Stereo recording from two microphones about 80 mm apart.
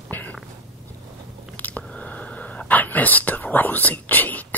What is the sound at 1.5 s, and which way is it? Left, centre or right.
Whispering, centre.